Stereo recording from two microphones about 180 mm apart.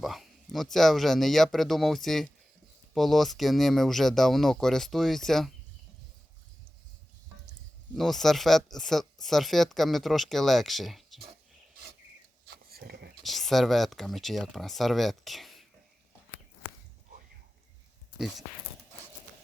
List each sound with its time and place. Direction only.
0.0 s speech: centre (ahead or behind)
7.9 s speech: centre (ahead or behind)
12.7 s a sound: 60° right (ahead or behind)
13.2 s speech: centre (ahead or behind)
18.2 s speech: centre (ahead or behind)